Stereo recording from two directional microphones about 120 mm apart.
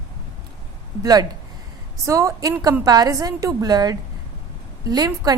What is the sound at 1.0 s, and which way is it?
A woman's voice, 30° right (ahead or behind).